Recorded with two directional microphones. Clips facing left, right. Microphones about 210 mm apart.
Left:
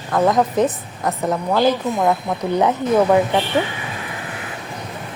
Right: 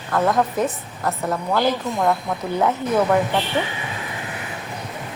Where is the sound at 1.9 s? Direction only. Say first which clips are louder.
Left 2 dB; centre (ahead or behind).